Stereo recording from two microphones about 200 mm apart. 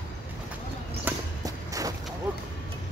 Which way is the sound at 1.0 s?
15° right (ahead or behind).